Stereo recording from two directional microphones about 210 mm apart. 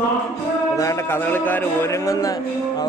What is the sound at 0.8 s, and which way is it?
A man's voice, 15° left (ahead or behind).